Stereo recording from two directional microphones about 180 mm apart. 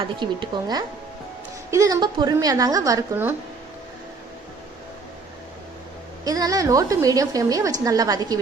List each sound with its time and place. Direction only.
0.0 s speech: 25° right (ahead or behind)
6.2 s speech: 20° right (ahead or behind)